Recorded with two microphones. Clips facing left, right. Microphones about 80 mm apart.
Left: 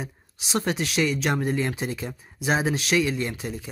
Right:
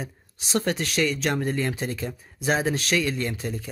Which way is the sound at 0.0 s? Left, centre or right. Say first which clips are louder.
Even; centre.